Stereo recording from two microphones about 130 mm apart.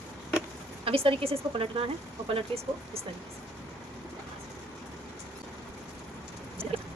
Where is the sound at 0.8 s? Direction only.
45° right (ahead or behind).